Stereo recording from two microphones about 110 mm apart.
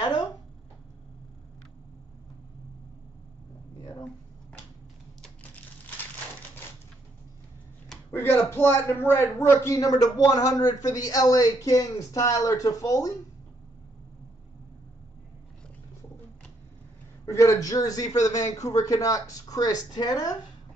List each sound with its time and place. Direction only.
8.1 s a man's voice: 20° left (ahead or behind)
17.4 s a man's voice: 30° left (ahead or behind)